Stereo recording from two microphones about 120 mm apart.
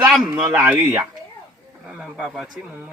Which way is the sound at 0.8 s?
20° right (ahead or behind).